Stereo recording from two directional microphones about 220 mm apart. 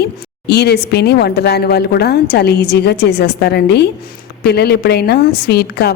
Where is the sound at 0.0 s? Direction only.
50° left (ahead or behind).